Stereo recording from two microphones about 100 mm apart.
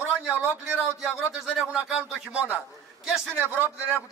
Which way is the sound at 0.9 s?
5° right (ahead or behind).